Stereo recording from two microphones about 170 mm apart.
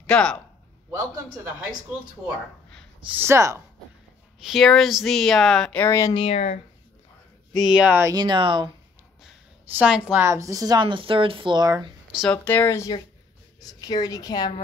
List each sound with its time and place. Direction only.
0.0 s speech: 5° left (ahead or behind)
3.1 s speech: 15° right (ahead or behind)
4.4 s speech: centre (ahead or behind); by 6.1 s 15° left (ahead or behind)
6.1 s speech: 35° left (ahead or behind)
7.7 s speech: 10° right (ahead or behind)
8.1 s a woman's voice: 25° right (ahead or behind)
9.8 s a woman's voice: 5° right (ahead or behind); by 11.9 s 25° right (ahead or behind)
12.2 s speech: 10° left (ahead or behind)